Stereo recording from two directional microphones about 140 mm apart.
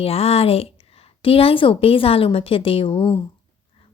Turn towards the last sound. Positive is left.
turn(degrees=40)  # may be behind; listen again after turning